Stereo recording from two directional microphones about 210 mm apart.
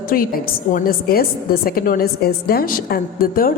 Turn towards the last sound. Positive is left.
turn(degrees=45)  # may be behind; listen again after turning